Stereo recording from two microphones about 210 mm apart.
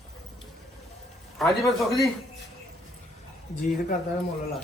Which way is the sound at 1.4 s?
Centre (ahead or behind).